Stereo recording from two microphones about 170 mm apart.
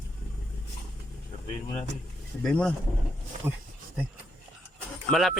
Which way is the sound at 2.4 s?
5° left (ahead or behind).